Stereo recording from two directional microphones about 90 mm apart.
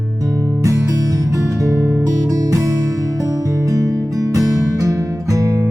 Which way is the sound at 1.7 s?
20° right (ahead or behind).